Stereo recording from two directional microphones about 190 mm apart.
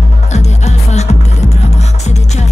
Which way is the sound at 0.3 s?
35° left (ahead or behind).